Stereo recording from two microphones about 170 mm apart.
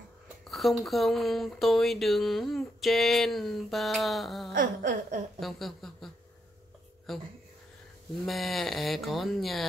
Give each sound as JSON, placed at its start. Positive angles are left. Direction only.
{"t": 0.5, "sound": "speech", "side_deg": 0}
{"t": 4.6, "sound": "a sound", "side_deg": -50}
{"t": 5.4, "sound": "speech", "side_deg": 0}
{"t": 7.1, "sound": "speech", "side_deg": 0}
{"t": 8.3, "sound": "speech", "side_deg": 0}